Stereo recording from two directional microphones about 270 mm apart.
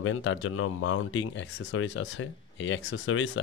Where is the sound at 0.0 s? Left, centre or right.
Left.